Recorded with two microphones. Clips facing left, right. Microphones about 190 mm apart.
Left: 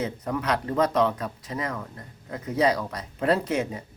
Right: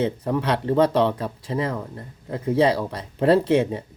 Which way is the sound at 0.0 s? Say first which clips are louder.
Right 5 dB; 30° right (ahead or behind).